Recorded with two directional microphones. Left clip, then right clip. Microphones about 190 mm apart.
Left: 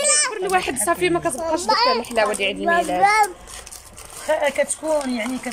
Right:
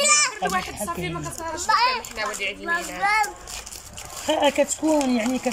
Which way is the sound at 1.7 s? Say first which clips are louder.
Left 1 dB; 30° left (ahead or behind).